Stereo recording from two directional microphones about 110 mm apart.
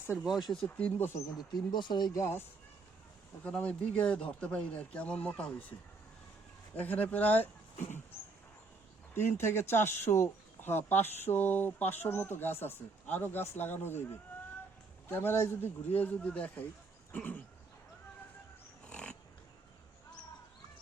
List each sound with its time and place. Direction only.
0.2 s speech: centre (ahead or behind); by 1.2 s 20° left (ahead or behind)
1.5 s speech: 45° left (ahead or behind)
2.1 s speech: 25° left (ahead or behind)
3.4 s speech: 10° left (ahead or behind)
6.7 s speech: 15° left (ahead or behind)
9.1 s speech: 20° left (ahead or behind)
17.1 s a sound: 15° left (ahead or behind)
18.9 s pig: 10° left (ahead or behind)